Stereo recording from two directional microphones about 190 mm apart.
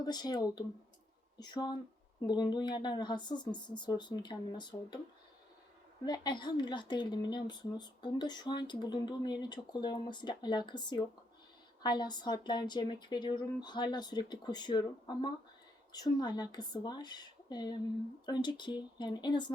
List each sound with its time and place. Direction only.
0.0 s speech: 20° left (ahead or behind)
6.1 s speech: 25° left (ahead or behind)